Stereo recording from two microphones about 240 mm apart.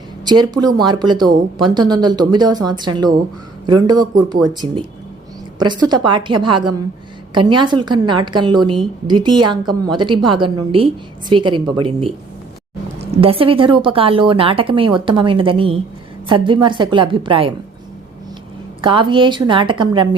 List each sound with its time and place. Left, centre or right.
0.3 s a woman's voice: centre
18.8 s a woman's voice: right